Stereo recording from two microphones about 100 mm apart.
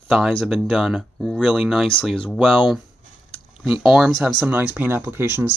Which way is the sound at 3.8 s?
5° right (ahead or behind).